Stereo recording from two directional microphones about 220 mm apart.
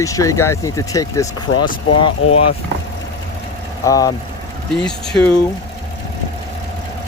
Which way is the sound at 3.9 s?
15° left (ahead or behind).